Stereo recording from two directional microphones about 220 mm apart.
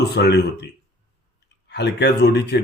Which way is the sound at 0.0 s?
50° left (ahead or behind).